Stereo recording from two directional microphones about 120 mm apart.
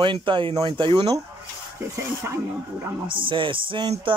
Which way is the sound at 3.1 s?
45° right (ahead or behind).